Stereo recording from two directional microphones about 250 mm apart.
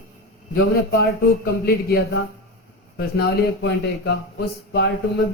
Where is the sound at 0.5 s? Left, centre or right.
Left.